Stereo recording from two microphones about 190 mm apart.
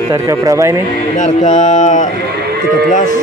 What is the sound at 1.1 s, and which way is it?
A man's voice, 40° left (ahead or behind).